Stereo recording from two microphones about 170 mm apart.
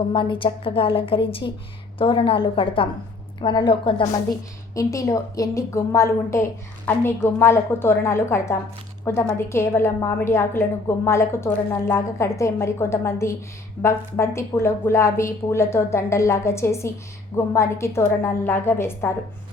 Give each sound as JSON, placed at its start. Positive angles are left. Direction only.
{"t": 0.1, "sound": "a woman's voice", "side_deg": 30}
{"t": 4.7, "sound": "a woman's voice", "side_deg": 20}